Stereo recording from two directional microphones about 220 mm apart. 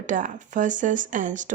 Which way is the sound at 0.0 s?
35° right (ahead or behind).